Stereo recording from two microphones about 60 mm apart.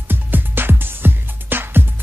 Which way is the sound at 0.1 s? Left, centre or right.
Right.